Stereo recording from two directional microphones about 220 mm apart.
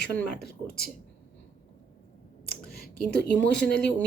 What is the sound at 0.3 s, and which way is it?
Speech, 45° left (ahead or behind).